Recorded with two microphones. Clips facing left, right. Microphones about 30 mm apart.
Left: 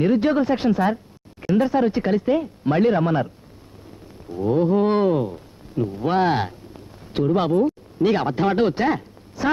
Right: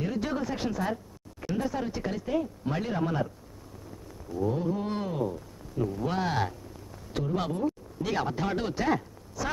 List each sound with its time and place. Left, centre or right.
0.0 s speech: left
4.3 s speech: left